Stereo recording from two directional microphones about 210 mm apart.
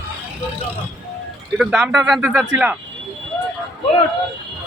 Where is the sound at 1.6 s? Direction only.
Centre (ahead or behind).